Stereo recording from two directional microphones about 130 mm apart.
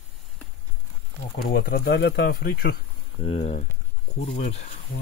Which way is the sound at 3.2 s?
50° left (ahead or behind).